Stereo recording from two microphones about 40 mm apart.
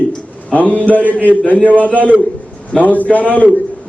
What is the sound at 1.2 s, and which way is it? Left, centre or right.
Speech, left.